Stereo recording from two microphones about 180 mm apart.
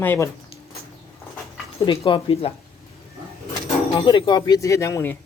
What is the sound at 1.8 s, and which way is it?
Speech, 25° left (ahead or behind).